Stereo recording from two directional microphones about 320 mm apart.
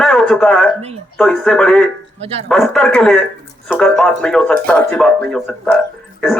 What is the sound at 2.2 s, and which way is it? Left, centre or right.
Speech, centre.